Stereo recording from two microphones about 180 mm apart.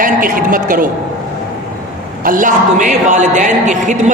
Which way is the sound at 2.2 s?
50° right (ahead or behind).